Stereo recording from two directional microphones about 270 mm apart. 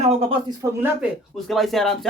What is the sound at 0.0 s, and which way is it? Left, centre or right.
Speech, right.